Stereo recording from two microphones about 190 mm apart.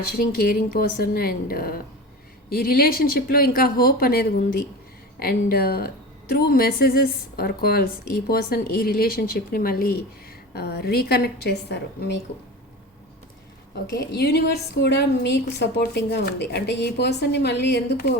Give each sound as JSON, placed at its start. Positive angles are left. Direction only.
{"t": 0.2, "sound": "a woman's voice", "side_deg": 55}
{"t": 13.9, "sound": "a woman's voice", "side_deg": 60}